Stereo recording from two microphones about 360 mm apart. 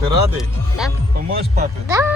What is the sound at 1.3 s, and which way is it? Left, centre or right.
Speech, right.